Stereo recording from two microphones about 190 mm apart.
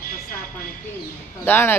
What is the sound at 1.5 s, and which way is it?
Speech, 10° left (ahead or behind).